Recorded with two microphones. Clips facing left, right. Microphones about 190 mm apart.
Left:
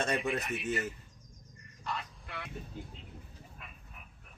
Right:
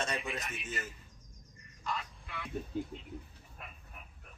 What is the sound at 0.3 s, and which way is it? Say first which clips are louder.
Speech: left 7 dB; 60° left (ahead or behind).